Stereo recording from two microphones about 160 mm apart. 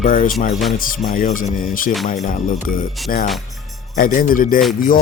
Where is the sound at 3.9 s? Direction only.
60° left (ahead or behind).